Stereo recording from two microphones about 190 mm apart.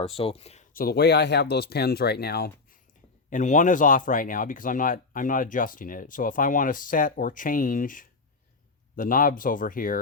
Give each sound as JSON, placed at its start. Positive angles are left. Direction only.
{"t": 0.0, "sound": "speech", "side_deg": 30}
{"t": 0.7, "sound": "speech", "side_deg": 50}
{"t": 3.2, "sound": "speech", "side_deg": 40}